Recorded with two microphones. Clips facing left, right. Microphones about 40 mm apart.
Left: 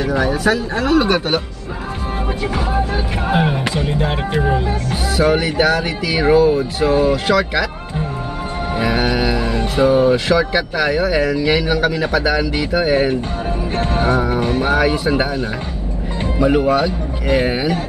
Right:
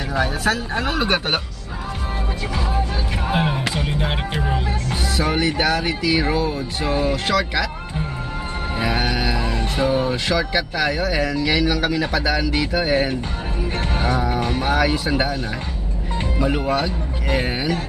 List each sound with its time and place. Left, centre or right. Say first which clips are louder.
0.7 s speech: left 6 dB; right
3.3 s speech: left 4 dB; centre
3.7 s music: left 4 dB; centre
5.1 s speech: left 6 dB; centre
8.7 s music: left 4 dB; centre
9.8 s speech: left 8 dB; centre
13.9 s music: left 5 dB; left
14.2 s speech: left 4 dB; centre
16.3 s speech: left 7 dB; centre